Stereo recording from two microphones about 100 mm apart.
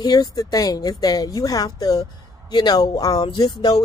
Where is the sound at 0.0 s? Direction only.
40° left (ahead or behind).